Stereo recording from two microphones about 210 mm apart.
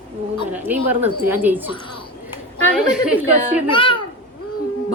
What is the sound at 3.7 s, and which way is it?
Speech, 25° left (ahead or behind).